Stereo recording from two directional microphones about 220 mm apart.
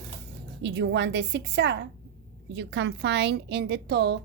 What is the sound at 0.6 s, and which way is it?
A woman's voice, 55° right (ahead or behind).